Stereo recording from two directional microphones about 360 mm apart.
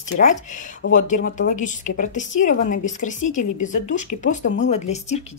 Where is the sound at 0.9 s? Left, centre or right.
Left.